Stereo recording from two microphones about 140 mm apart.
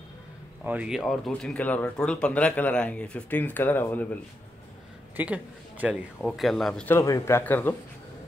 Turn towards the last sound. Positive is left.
turn(degrees=15)  # may be behind; listen again after turning